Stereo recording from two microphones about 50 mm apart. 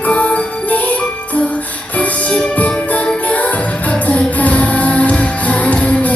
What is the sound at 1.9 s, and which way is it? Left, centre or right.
Music, left.